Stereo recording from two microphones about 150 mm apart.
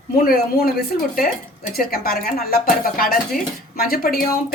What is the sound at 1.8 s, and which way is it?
Speech, 85° left.